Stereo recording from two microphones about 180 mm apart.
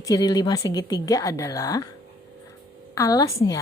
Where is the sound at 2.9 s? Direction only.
20° left (ahead or behind).